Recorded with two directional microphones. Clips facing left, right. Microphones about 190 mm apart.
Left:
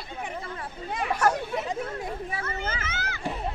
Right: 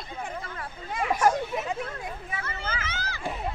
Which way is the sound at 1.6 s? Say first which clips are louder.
Left 2 dB; 35° left (ahead or behind).